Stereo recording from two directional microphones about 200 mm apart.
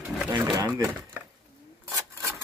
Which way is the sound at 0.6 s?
15° right (ahead or behind).